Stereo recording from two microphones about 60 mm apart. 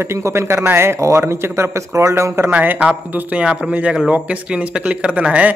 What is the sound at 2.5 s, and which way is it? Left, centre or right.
Speech, right.